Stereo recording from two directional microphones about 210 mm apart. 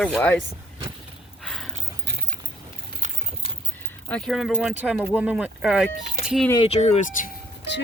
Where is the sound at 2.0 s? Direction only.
50° right (ahead or behind).